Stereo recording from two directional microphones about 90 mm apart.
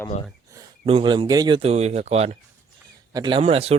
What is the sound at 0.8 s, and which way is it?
Speech, 75° right (ahead or behind).